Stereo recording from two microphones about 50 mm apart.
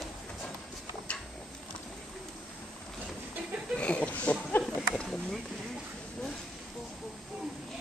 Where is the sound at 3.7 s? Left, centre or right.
Left.